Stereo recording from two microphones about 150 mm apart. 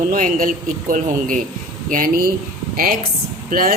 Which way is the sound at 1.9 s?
75° right (ahead or behind).